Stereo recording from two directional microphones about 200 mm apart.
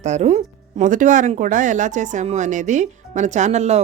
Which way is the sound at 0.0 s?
35° right (ahead or behind).